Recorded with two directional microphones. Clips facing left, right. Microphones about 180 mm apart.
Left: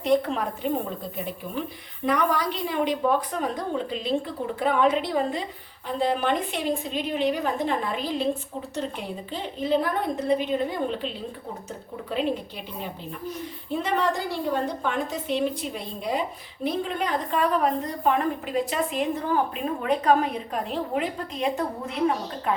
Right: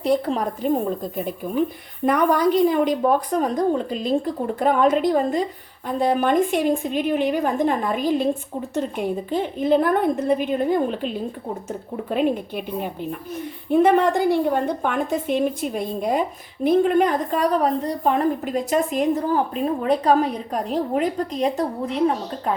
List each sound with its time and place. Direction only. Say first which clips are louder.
0.0 s a woman's voice: right 2 dB; 35° right (ahead or behind)
2.0 s a woman's voice: right 6 dB; 50° right (ahead or behind)